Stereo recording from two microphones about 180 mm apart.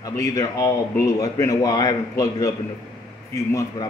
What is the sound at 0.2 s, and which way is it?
Speech, 20° left (ahead or behind).